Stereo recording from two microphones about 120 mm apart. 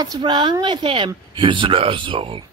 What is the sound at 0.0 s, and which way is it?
Speech, 35° right (ahead or behind).